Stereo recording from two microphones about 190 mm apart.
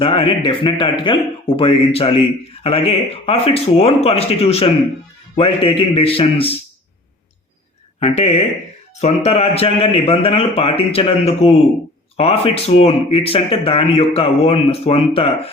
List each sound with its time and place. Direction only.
0.0 s speech: 30° left (ahead or behind)
7.9 s speech: 35° left (ahead or behind)